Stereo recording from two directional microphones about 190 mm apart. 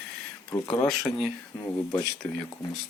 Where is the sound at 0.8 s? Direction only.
10° left (ahead or behind).